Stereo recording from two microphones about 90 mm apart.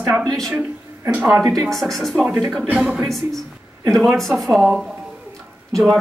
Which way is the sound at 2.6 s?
15° right (ahead or behind).